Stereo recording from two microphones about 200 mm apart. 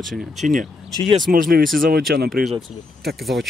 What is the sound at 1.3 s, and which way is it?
Speech, 45° right (ahead or behind).